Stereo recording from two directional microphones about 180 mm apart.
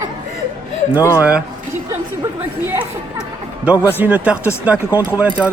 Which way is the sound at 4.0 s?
10° right (ahead or behind).